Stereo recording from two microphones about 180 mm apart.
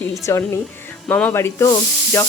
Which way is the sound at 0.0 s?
15° left (ahead or behind).